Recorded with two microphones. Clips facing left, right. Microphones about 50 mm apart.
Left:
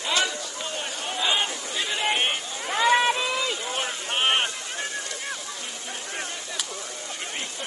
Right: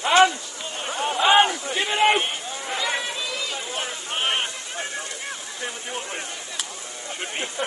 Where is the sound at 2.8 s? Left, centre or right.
Left.